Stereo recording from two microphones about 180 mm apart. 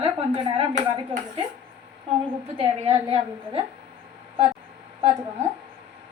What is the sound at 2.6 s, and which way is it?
A woman's voice, 30° right (ahead or behind).